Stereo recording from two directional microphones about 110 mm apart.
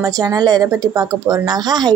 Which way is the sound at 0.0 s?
35° right (ahead or behind).